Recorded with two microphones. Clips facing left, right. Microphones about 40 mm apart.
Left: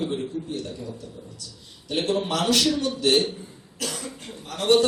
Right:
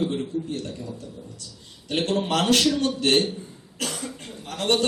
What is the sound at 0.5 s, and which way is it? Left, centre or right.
A man's voice, right.